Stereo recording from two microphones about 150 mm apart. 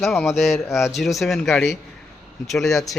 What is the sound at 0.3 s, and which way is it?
Speech, centre (ahead or behind).